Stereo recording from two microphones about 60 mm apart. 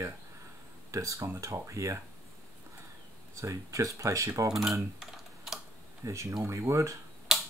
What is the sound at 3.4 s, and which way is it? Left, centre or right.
Speech, right.